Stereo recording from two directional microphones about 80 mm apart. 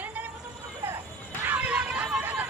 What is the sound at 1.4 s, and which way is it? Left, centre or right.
Hubbub, centre.